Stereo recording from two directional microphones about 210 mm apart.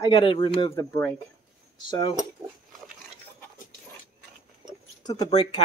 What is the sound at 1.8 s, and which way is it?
Speech, 20° left (ahead or behind).